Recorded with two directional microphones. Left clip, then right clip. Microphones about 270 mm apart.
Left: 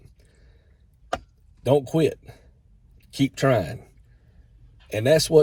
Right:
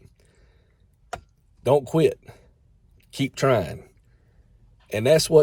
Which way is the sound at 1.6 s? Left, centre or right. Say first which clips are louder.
Right 1 dB; right.